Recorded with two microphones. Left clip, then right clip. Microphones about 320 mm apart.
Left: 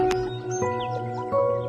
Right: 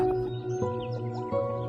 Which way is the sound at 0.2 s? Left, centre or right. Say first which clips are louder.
Left 4 dB; left.